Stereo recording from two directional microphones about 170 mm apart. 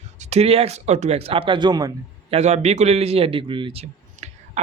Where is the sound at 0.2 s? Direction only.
40° right (ahead or behind); by 1.9 s 25° right (ahead or behind).